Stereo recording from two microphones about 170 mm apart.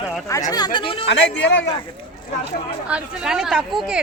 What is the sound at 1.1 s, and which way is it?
Speech, 90° left.